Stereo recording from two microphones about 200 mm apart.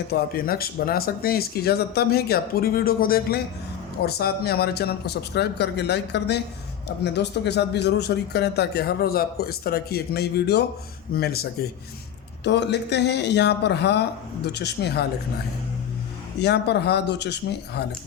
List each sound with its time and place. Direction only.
0.1 s speech: 50° left (ahead or behind)
16.4 s speech: 55° left (ahead or behind)